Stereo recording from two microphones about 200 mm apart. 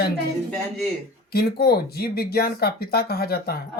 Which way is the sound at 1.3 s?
50° left (ahead or behind).